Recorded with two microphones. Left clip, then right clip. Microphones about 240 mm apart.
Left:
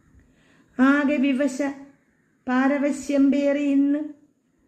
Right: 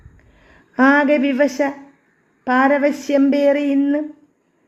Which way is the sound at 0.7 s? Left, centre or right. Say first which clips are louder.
Right 7 dB; centre.